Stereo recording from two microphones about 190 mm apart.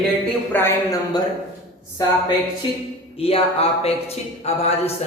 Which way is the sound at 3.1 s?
30° left (ahead or behind).